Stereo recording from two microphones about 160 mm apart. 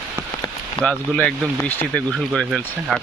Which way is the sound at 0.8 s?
5° left (ahead or behind).